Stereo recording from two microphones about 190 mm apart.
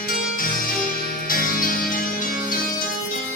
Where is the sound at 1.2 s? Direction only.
45° left (ahead or behind).